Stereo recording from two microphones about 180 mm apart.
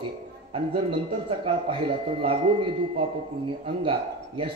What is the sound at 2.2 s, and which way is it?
A man's voice, 30° right (ahead or behind).